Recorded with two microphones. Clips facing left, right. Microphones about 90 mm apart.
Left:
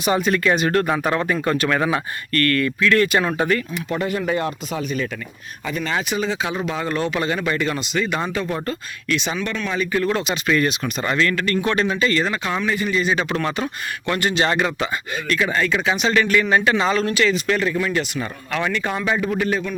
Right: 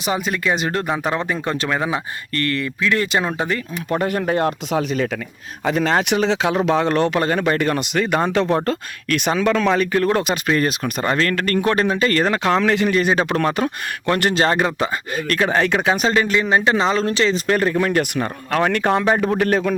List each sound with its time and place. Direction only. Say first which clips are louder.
0.0 s speech: left 3 dB; 15° right (ahead or behind)
3.8 s speech: right 4 dB; 50° right (ahead or behind)
4.7 s speech: right 5 dB; 90° right; by 8.3 s 55° right (ahead or behind)
8.3 s speech: right 6 dB; 75° right (ahead or behind)
9.0 s speech: right 5 dB; 55° right (ahead or behind)
10.5 s speech: left 1 dB; 40° right (ahead or behind)
15.4 s speech: right 6 dB; 65° right (ahead or behind)
15.7 s speech: right 2 dB; 40° right (ahead or behind)
16.2 s speech: even; 25° right (ahead or behind); by 19.3 s 50° right (ahead or behind)
19.4 s speech: right 4 dB; 65° right (ahead or behind)